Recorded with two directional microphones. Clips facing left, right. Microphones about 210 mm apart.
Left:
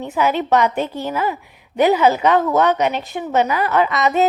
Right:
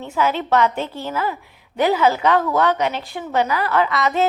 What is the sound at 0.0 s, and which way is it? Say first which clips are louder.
A woman's voice: left 2 dB; 15° left (ahead or behind).